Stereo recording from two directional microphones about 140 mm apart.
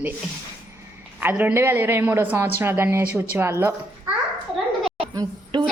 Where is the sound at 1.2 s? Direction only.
10° right (ahead or behind).